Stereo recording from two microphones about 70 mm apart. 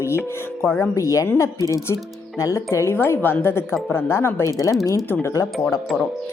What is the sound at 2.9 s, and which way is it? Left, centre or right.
Speech, left.